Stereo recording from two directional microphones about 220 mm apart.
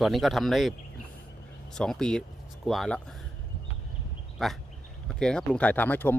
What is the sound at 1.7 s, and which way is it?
Speech, centre (ahead or behind).